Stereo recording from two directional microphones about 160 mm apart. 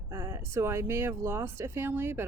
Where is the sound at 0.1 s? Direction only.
15° right (ahead or behind).